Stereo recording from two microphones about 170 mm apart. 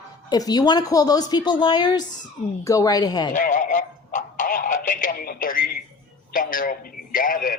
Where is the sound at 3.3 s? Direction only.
50° left (ahead or behind).